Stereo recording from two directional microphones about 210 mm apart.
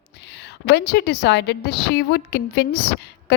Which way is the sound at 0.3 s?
55° left (ahead or behind).